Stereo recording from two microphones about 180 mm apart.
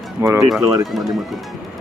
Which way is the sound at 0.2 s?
15° right (ahead or behind).